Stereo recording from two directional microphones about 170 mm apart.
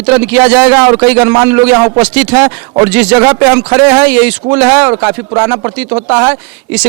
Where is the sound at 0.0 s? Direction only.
10° right (ahead or behind).